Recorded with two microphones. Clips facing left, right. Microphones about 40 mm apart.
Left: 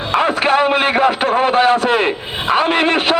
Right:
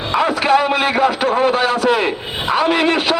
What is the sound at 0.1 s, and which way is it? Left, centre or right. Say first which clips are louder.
A man's voice: even; left.